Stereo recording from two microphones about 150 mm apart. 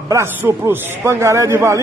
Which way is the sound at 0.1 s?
15° right (ahead or behind).